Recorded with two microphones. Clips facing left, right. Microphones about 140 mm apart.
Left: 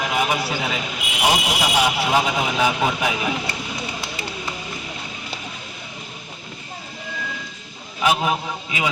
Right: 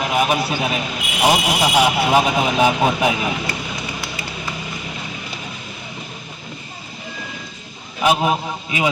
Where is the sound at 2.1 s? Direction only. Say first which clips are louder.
Right 5 dB; 20° right (ahead or behind).